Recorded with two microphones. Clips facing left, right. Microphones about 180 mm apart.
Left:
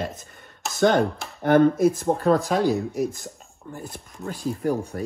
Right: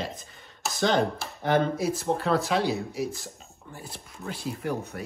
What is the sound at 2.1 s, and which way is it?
Speech, 35° left (ahead or behind).